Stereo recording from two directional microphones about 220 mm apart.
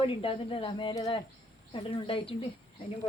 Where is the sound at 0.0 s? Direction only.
25° left (ahead or behind).